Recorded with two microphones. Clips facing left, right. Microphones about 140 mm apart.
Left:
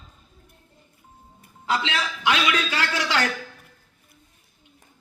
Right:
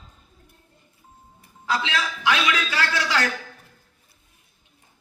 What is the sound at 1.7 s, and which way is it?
A man's voice, 30° left (ahead or behind).